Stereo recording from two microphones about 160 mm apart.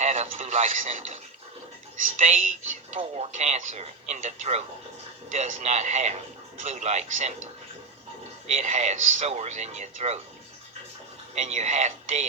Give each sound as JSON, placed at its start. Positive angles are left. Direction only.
{"t": 0.0, "sound": "speech", "side_deg": -45}
{"t": 8.4, "sound": "speech", "side_deg": -45}
{"t": 11.3, "sound": "speech", "side_deg": -45}